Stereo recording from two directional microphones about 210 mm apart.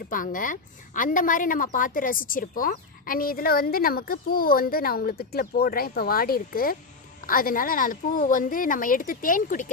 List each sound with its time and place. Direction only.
0.1 s a woman's voice: 40° left (ahead or behind)